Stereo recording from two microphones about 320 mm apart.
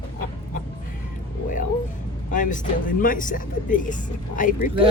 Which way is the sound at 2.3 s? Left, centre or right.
Left.